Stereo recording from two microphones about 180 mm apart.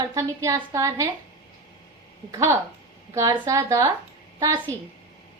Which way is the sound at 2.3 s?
15° right (ahead or behind).